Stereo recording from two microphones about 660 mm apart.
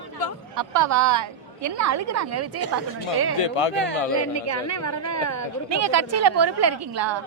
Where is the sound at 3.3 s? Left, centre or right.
Left.